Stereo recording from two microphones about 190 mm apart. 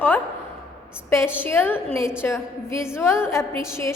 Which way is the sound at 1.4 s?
10° left (ahead or behind).